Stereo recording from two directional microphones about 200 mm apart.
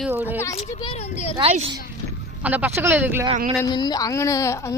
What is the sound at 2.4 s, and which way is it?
Speech, 10° right (ahead or behind).